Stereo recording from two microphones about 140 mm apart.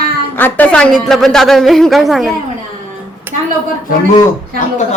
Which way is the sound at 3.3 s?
15° right (ahead or behind).